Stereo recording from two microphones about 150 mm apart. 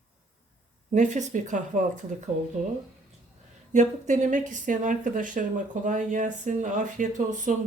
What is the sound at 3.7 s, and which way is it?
Speech, 55° right (ahead or behind).